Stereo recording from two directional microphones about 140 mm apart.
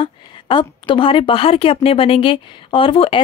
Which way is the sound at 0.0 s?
35° left (ahead or behind).